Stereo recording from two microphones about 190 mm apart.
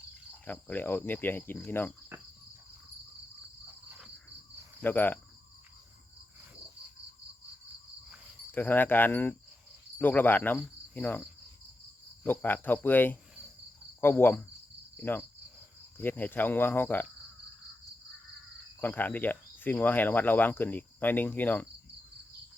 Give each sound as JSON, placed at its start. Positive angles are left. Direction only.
{"t": 0.4, "sound": "speech", "side_deg": 10}
{"t": 4.8, "sound": "speech", "side_deg": 10}
{"t": 8.5, "sound": "speech", "side_deg": 10}
{"t": 12.2, "sound": "speech", "side_deg": 10}
{"t": 14.9, "sound": "cricket", "side_deg": 10}
{"t": 16.0, "sound": "speech", "side_deg": 10}
{"t": 18.8, "sound": "speech", "side_deg": 10}